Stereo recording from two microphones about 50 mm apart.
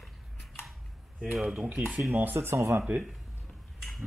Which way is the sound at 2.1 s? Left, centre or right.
Right.